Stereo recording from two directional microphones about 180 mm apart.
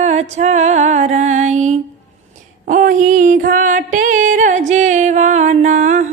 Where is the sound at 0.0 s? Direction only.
40° right (ahead or behind).